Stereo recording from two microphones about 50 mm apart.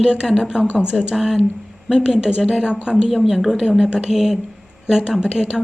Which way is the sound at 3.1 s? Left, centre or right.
Centre.